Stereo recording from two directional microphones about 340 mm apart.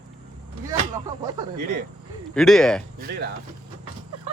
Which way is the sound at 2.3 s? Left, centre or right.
Centre.